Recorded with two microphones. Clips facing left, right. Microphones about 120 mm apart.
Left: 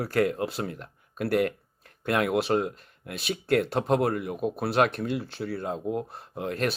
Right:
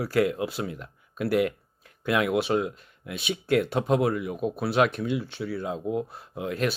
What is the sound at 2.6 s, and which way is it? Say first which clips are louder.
Speech: even; 45° left (ahead or behind).